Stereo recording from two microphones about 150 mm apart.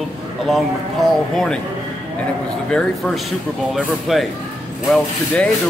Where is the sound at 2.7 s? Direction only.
5° left (ahead or behind).